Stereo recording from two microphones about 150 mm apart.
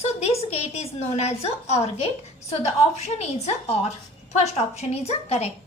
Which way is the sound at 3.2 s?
45° left (ahead or behind).